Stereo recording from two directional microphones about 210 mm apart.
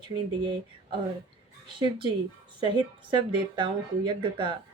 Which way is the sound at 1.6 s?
25° right (ahead or behind).